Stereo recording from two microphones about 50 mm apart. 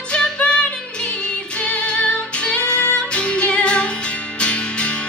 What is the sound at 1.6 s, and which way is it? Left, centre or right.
Music, left.